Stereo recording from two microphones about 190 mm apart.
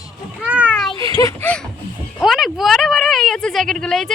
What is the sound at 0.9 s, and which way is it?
Speech, 20° left (ahead or behind).